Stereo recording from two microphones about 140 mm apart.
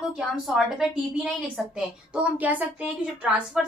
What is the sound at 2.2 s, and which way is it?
Speech, 10° right (ahead or behind).